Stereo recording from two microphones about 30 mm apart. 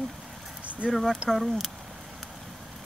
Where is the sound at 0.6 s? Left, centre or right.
Right.